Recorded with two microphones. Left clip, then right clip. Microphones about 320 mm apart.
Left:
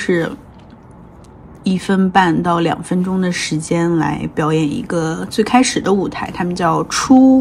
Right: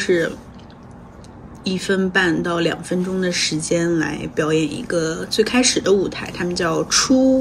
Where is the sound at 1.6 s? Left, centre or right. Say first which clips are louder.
Left 2 dB; centre.